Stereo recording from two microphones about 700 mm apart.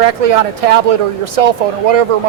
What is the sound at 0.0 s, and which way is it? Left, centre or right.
Speech, right.